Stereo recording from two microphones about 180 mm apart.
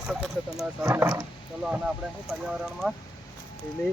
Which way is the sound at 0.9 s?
15° right (ahead or behind).